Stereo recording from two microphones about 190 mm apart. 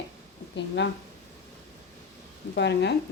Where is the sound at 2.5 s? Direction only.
65° left (ahead or behind).